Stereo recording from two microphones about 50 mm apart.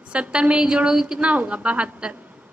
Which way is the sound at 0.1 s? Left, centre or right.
Right.